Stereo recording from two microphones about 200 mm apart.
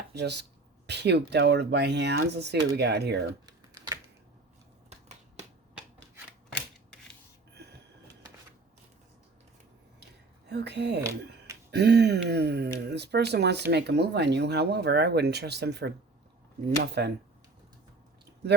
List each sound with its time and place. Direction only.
0.1 s speech: 55° right (ahead or behind)
3.4 s computer keyboard: 20° right (ahead or behind)
4.9 s a sound: 35° right (ahead or behind)
6.5 s scissors: 5° left (ahead or behind)
10.5 s speech: 55° right (ahead or behind)